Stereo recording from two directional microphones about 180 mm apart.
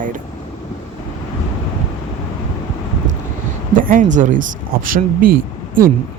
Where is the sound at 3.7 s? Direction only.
50° right (ahead or behind).